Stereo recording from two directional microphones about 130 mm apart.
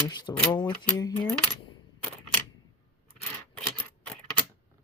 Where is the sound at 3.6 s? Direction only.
5° left (ahead or behind).